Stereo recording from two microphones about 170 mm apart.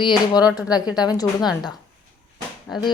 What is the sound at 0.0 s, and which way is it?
Speech, 25° left (ahead or behind).